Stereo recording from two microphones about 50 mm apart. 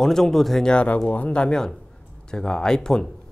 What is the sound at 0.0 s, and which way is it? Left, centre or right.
Speech, centre.